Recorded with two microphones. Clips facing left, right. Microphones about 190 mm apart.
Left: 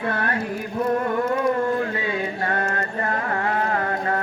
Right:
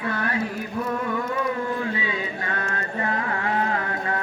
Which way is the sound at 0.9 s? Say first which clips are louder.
Left 7 dB; 50° left (ahead or behind).